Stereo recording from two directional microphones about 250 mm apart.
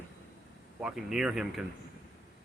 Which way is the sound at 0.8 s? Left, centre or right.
Centre.